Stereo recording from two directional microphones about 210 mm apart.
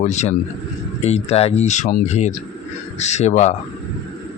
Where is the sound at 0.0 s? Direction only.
35° left (ahead or behind).